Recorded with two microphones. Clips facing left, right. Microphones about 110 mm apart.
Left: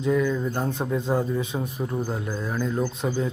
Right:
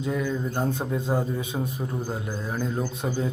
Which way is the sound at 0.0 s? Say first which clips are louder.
Left 4 dB; 20° right (ahead or behind).